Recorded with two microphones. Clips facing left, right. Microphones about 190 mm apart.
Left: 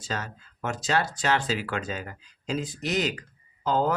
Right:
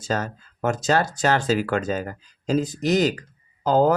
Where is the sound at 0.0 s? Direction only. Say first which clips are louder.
Right 8 dB; 45° right (ahead or behind).